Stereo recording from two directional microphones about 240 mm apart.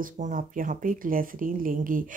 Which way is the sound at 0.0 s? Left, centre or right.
Right.